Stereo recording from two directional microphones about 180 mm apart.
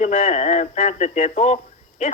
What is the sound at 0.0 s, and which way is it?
A man's voice, 40° left (ahead or behind).